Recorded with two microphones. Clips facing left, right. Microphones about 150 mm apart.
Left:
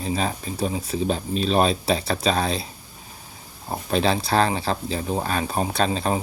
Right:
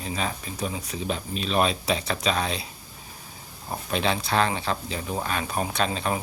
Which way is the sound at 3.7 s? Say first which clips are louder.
Left 4 dB; 35° left (ahead or behind).